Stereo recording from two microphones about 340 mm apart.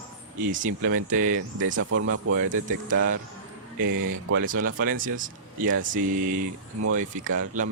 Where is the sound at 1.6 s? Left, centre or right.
Right.